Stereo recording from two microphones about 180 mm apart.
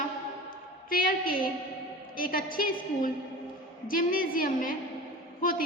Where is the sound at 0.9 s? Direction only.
50° left (ahead or behind).